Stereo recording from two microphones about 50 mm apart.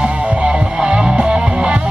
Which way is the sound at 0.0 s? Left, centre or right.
Centre.